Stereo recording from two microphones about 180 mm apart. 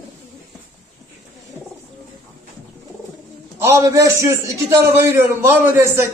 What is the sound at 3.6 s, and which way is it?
A man's voice, 15° right (ahead or behind).